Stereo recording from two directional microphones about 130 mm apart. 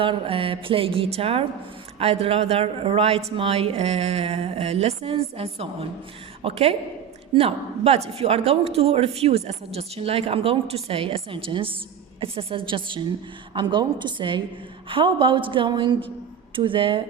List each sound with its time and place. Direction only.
0.0 s a woman's voice: 45° right (ahead or behind)